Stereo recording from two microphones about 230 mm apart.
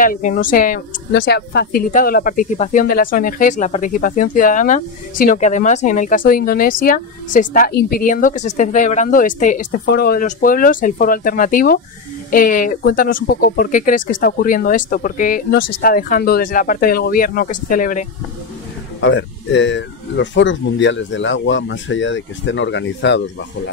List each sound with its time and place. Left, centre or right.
0.0 s a woman's voice: left
18.9 s speech: left